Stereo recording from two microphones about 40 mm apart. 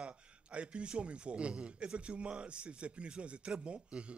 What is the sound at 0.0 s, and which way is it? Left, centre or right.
A man's voice, right.